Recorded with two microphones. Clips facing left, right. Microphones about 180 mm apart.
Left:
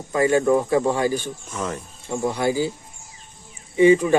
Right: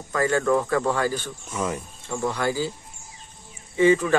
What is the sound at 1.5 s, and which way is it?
Speech, 10° right (ahead or behind).